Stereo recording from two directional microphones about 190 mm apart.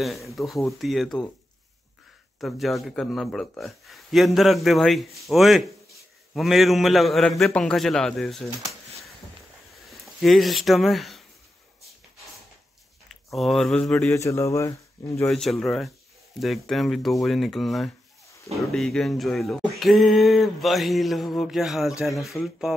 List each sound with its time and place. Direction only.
0.0 s speech: centre (ahead or behind)
2.4 s speech: centre (ahead or behind)
9.8 s speech: centre (ahead or behind)
13.1 s speech: centre (ahead or behind)
14.1 s speech: 15° left (ahead or behind)
15.2 s speech: centre (ahead or behind)